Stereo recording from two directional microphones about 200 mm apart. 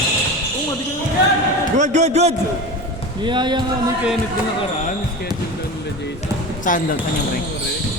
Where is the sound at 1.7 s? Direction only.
35° right (ahead or behind).